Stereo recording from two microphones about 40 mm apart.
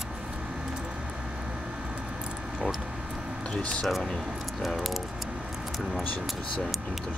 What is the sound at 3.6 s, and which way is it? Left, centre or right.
Speech, left.